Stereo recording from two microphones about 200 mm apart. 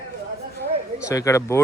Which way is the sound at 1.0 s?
15° left (ahead or behind).